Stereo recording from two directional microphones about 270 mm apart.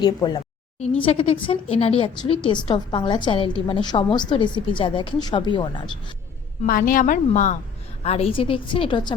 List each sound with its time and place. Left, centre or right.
0.0 s a sound: centre
1.0 s a woman's voice: left
6.7 s a woman's voice: left; by 9.1 s centre